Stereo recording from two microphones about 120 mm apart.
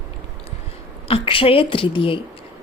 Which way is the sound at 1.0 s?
50° left (ahead or behind).